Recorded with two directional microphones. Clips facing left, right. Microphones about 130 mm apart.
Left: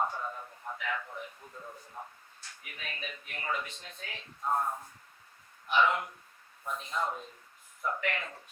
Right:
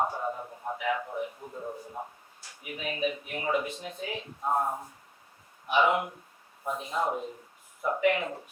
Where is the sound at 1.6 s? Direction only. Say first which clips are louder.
Right 8 dB; 30° right (ahead or behind).